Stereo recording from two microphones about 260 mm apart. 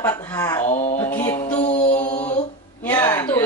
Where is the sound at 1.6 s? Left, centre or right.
Left.